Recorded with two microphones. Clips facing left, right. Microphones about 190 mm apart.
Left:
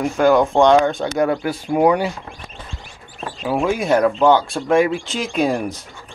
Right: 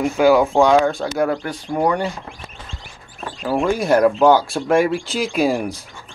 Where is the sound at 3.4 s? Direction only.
5° left (ahead or behind).